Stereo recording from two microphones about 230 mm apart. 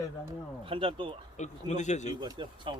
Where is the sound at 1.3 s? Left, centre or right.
Left.